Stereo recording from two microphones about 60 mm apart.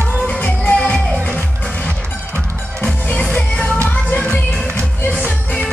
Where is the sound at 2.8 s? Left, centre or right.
Centre.